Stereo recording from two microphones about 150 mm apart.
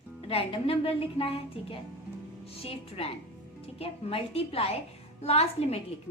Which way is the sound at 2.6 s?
40° left (ahead or behind).